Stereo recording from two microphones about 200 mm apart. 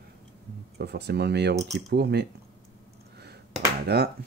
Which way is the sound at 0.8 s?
55° right (ahead or behind).